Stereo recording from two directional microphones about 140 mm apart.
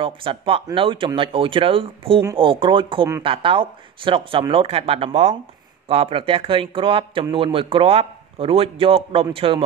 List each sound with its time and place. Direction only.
0.0 s a man's voice: 40° right (ahead or behind)